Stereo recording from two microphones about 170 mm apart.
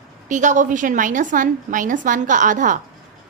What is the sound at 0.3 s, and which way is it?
A woman's voice, 45° right (ahead or behind).